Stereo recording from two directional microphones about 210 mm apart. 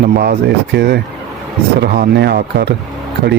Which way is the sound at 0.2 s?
50° right (ahead or behind).